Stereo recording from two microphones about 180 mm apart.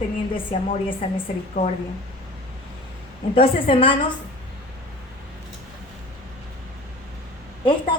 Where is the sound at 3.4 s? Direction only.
30° left (ahead or behind).